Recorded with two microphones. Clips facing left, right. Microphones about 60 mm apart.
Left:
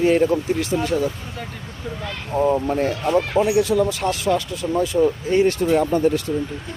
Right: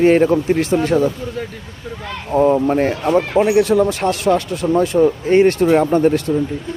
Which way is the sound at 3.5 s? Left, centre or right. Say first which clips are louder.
Right 4 dB; right.